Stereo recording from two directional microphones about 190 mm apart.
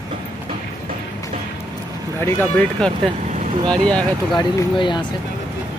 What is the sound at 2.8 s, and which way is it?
Speech, 5° left (ahead or behind).